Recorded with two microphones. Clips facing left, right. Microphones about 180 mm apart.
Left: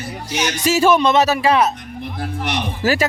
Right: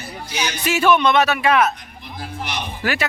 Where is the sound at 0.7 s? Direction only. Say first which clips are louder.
Left 1 dB; 35° left (ahead or behind).